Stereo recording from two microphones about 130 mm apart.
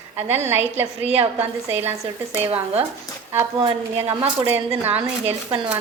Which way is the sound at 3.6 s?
50° right (ahead or behind).